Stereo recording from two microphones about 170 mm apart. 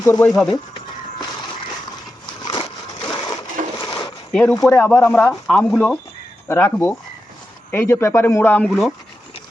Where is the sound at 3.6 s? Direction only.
55° right (ahead or behind).